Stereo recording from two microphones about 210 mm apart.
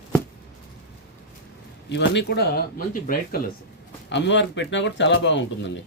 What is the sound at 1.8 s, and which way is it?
Speech, 55° left (ahead or behind).